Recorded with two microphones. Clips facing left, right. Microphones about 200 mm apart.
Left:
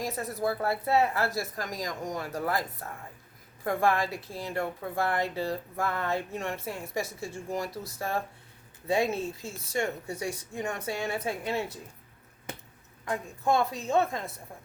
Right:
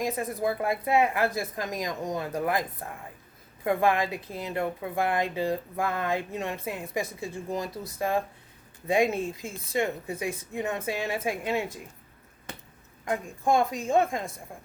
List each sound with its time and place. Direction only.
0.4 s a woman's voice: 15° right (ahead or behind)
13.1 s a woman's voice: 15° right (ahead or behind)